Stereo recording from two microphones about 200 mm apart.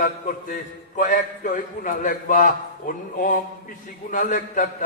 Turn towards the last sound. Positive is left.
turn(degrees=40)  # may be behind; listen again after turning